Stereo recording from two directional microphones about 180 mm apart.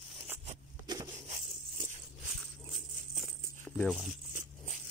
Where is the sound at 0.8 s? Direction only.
20° right (ahead or behind).